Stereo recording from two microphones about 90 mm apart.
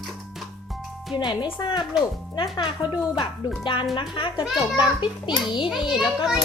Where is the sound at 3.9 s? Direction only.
65° left (ahead or behind).